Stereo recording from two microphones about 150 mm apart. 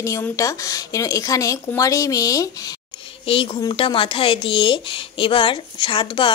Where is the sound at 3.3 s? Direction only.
35° left (ahead or behind).